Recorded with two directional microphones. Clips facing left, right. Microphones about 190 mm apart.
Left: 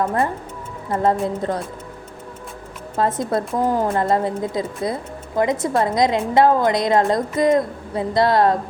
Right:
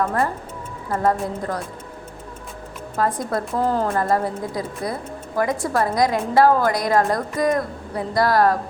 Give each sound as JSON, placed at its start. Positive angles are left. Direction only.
{"t": 0.0, "sound": "a woman's voice", "side_deg": 20}
{"t": 2.9, "sound": "a woman's voice", "side_deg": 25}
{"t": 3.6, "sound": "a woman's voice", "side_deg": 15}